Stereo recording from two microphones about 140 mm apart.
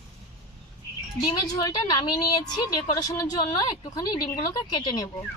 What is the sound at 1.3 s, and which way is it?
A woman's voice, 25° left (ahead or behind).